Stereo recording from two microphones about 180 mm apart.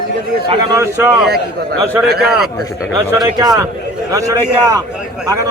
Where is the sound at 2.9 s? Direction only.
15° right (ahead or behind).